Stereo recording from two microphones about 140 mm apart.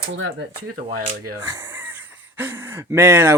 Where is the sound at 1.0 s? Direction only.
90° right.